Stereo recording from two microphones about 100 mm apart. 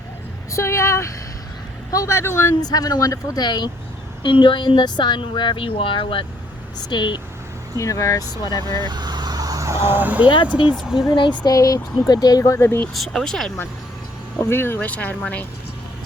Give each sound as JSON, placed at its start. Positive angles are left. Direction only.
{"t": 0.5, "sound": "speech", "side_deg": 30}
{"t": 2.6, "sound": "speech", "side_deg": 40}
{"t": 6.7, "sound": "speech", "side_deg": 45}
{"t": 7.8, "sound": "speech", "side_deg": 30}
{"t": 8.9, "sound": "vehicle", "side_deg": -45}
{"t": 10.2, "sound": "speech", "side_deg": 50}
{"t": 12.6, "sound": "speech", "side_deg": 20}
{"t": 12.9, "sound": "speech", "side_deg": 0}
{"t": 14.3, "sound": "speech", "side_deg": 20}